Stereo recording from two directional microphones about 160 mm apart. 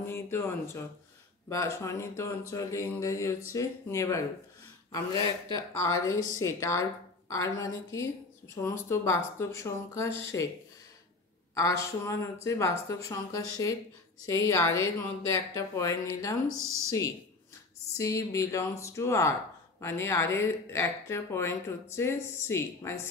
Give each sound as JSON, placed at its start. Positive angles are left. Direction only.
{"t": 0.0, "sound": "speech", "side_deg": 15}
{"t": 11.5, "sound": "speech", "side_deg": 20}
{"t": 16.5, "sound": "speech", "side_deg": -20}
{"t": 17.9, "sound": "speech", "side_deg": 20}